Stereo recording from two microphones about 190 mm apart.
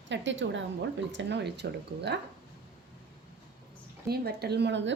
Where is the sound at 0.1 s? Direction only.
75° right (ahead or behind).